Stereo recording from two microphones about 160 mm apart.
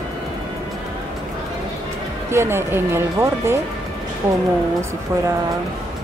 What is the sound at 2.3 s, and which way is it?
Speech, 15° right (ahead or behind).